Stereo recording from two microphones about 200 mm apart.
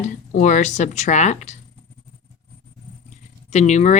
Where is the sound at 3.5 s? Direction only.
35° left (ahead or behind).